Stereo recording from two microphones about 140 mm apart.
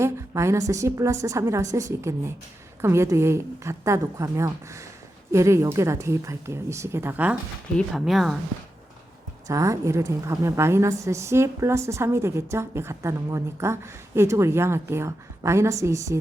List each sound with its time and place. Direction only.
0.0 s a woman's voice: 20° right (ahead or behind)
7.8 s speech: centre (ahead or behind)
9.5 s a woman's voice: 20° right (ahead or behind)